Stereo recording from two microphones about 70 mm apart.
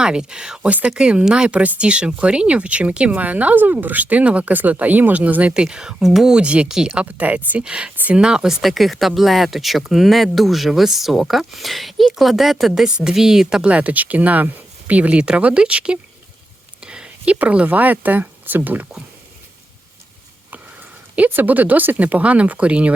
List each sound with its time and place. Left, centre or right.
0.0 s speech: centre
8.6 s speech: centre
16.8 s a sound: centre
17.3 s speech: centre
21.2 s speech: right